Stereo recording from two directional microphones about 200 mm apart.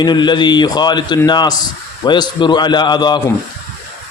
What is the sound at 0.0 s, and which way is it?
A man's voice, 20° left (ahead or behind).